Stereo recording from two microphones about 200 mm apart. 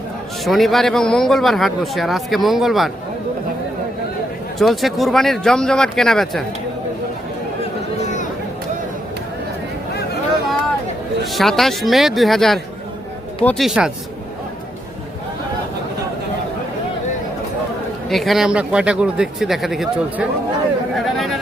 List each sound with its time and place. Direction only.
0.4 s a man's voice: centre (ahead or behind)
4.5 s a man's voice: centre (ahead or behind)
8.0 s chatter: 40° left (ahead or behind)
11.3 s a man's voice: centre (ahead or behind)
18.1 s a man's voice: centre (ahead or behind)
20.9 s a sound: centre (ahead or behind)